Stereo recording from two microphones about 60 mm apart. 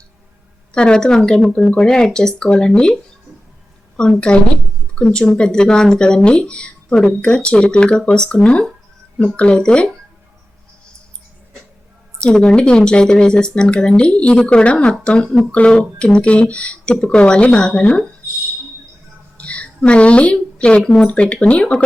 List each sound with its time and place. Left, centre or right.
0.7 s speech: centre
12.2 s speech: centre
19.4 s a sound: centre
21.0 s speech: centre